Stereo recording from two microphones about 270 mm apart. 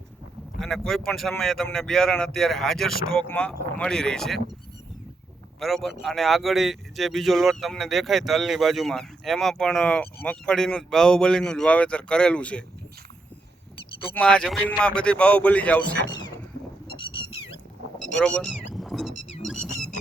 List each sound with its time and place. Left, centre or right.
0.6 s speech: centre
5.5 s speech: centre
14.1 s speech: centre
16.0 s a sound: centre
18.2 s speech: centre
19.4 s a sound: centre